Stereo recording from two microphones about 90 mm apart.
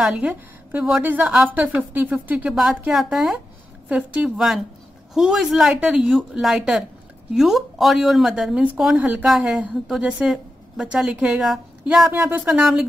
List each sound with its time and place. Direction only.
0.0 s a woman's voice: 15° right (ahead or behind)
2.5 s a woman's voice: 5° right (ahead or behind)